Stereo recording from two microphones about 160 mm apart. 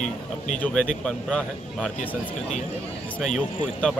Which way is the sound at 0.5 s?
5° left (ahead or behind).